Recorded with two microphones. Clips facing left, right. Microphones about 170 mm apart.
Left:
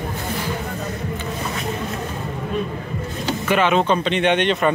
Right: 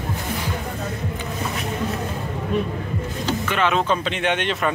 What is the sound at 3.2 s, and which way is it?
Speech, 10° left (ahead or behind).